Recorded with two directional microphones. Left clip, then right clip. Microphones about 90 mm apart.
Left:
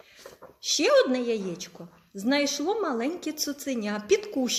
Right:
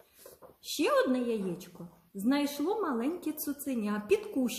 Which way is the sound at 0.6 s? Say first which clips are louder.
Left 7 dB; 35° right (ahead or behind).